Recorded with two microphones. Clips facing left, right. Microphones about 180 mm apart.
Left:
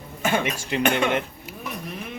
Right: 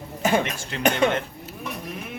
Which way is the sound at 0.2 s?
35° right (ahead or behind).